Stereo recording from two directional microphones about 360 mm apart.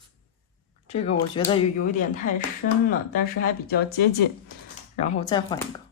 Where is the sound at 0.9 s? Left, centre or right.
Centre.